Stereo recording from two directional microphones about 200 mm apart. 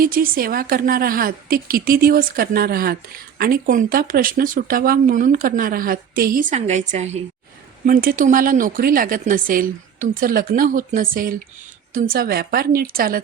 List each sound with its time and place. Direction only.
0.0 s a woman's voice: 45° right (ahead or behind)